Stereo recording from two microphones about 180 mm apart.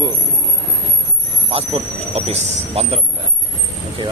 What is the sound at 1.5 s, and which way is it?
Speech, 35° right (ahead or behind).